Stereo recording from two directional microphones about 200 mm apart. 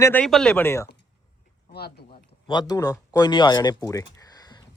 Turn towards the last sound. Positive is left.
turn(degrees=20)  # may be behind; listen again after turning